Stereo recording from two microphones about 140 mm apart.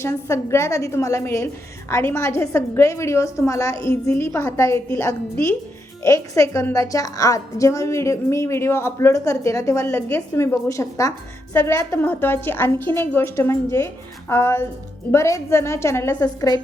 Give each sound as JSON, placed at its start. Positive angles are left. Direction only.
{"t": 0.0, "sound": "a woman's voice", "side_deg": 20}